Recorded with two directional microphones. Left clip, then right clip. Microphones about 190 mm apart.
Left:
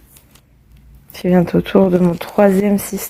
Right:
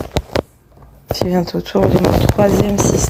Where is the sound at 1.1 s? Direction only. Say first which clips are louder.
Left 2 dB; 35° left (ahead or behind).